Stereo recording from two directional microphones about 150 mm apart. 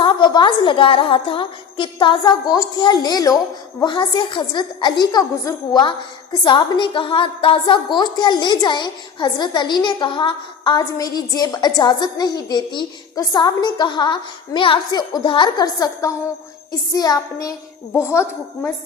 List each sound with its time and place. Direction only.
0.0 s a woman's voice: 30° left (ahead or behind)